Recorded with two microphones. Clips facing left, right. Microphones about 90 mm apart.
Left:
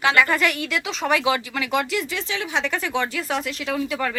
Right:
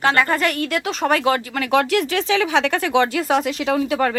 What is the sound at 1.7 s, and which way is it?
Speech, 60° right (ahead or behind).